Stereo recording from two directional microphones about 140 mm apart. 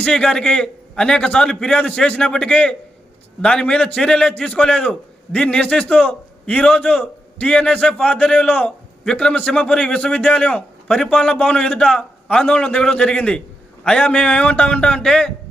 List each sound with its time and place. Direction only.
0.0 s a man's voice: 5° left (ahead or behind)